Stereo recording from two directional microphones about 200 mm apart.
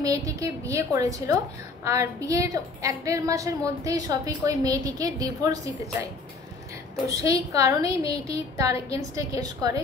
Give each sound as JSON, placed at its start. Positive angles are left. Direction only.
{"t": 0.0, "sound": "a woman's voice", "side_deg": -15}
{"t": 7.1, "sound": "a woman's voice", "side_deg": -15}